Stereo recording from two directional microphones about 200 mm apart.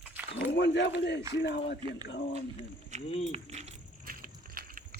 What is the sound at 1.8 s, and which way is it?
Speech, 25° right (ahead or behind).